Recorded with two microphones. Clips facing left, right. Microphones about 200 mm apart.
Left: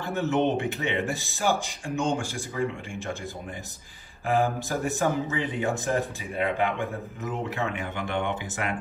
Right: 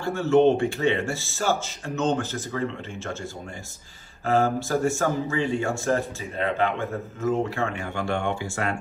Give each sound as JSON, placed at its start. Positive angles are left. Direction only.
{"t": 0.0, "sound": "a man's voice", "side_deg": 20}
{"t": 4.3, "sound": "a man's voice", "side_deg": 15}